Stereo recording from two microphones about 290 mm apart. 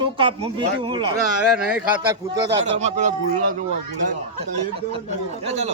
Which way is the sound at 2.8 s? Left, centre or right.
Right.